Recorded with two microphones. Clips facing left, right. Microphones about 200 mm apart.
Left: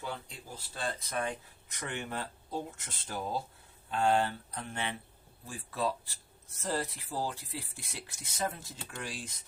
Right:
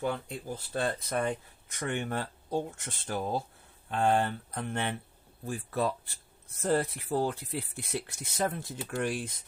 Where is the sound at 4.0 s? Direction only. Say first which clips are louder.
Right 2 dB; 55° right (ahead or behind).